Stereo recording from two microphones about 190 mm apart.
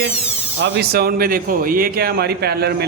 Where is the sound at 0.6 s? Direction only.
65° right (ahead or behind).